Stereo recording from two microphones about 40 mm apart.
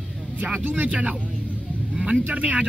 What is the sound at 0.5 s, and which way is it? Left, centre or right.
Speech, right.